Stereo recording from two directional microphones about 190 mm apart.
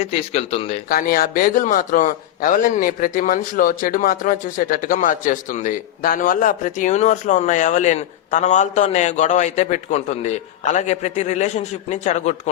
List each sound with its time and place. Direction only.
0.0 s a man's voice: 35° left (ahead or behind)
0.9 s a man's voice: 50° left (ahead or behind)